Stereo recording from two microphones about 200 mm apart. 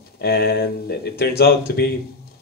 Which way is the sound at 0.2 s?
50° left (ahead or behind).